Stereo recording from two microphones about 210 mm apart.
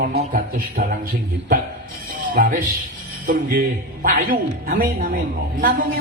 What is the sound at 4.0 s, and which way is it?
Speech, 40° right (ahead or behind).